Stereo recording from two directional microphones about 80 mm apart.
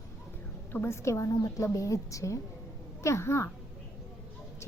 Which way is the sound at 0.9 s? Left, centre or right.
Left.